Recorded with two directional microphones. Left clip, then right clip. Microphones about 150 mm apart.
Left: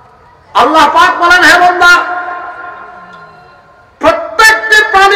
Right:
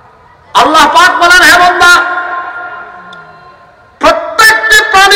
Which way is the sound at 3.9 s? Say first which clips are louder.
Right 1 dB; 35° right (ahead or behind).